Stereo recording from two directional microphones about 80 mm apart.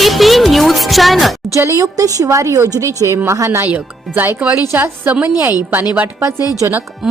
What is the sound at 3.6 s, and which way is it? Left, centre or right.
Speech, right.